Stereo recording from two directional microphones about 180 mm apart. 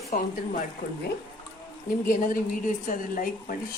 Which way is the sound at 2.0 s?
50° left (ahead or behind).